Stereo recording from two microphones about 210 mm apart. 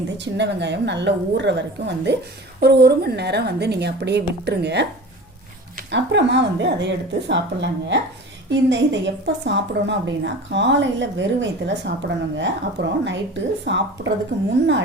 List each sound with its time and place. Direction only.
0.2 s a woman's voice: 55° right (ahead or behind)
5.9 s a woman's voice: 55° right (ahead or behind)